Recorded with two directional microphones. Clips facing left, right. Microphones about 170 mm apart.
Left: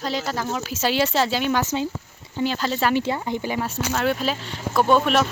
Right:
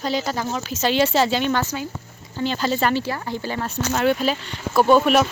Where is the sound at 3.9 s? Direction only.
5° right (ahead or behind).